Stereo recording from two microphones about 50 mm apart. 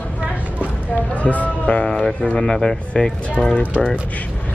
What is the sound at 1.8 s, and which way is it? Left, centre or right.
Speech, centre.